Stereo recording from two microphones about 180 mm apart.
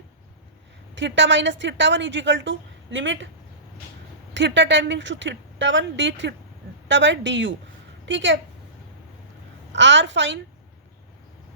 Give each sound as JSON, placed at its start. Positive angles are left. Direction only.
{"t": 0.9, "sound": "a woman's voice", "side_deg": -80}
{"t": 4.4, "sound": "a woman's voice", "side_deg": -75}
{"t": 9.7, "sound": "a woman's voice", "side_deg": -85}